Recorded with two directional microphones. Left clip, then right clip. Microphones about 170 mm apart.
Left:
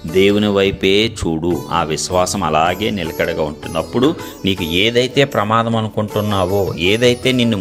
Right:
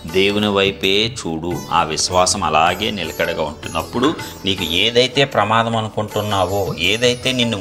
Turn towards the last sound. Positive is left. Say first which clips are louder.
# left 2 dB
turn(degrees=50)  # may be behind; listen again after turning